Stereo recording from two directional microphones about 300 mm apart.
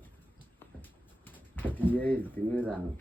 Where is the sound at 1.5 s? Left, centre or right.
Centre.